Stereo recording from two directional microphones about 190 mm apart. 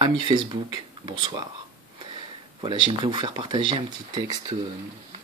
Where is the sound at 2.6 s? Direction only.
25° right (ahead or behind).